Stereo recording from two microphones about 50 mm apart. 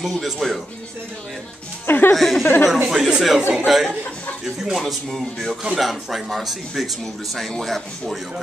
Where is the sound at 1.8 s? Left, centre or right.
Left.